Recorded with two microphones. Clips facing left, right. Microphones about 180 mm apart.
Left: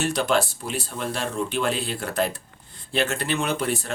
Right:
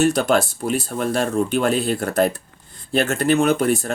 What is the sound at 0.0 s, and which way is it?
Speech, 45° right (ahead or behind).